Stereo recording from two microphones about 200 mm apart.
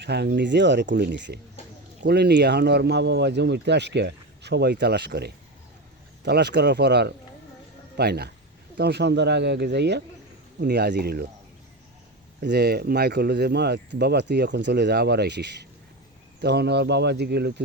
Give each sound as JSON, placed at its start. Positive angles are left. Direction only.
{"t": 0.0, "sound": "speech", "side_deg": -55}
{"t": 12.4, "sound": "speech", "side_deg": -55}